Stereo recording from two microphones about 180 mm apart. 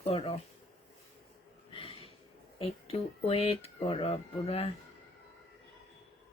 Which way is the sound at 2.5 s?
35° left (ahead or behind).